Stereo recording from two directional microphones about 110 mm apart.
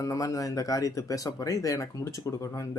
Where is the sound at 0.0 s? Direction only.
30° left (ahead or behind).